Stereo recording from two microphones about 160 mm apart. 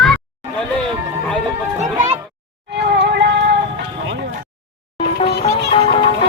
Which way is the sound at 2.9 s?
90° right.